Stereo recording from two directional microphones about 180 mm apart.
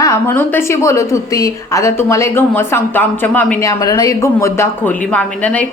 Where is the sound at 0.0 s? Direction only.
15° left (ahead or behind).